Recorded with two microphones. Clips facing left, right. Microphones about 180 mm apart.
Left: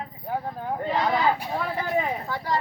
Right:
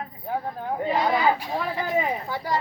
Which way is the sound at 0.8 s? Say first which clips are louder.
Right 1 dB; 10° right (ahead or behind).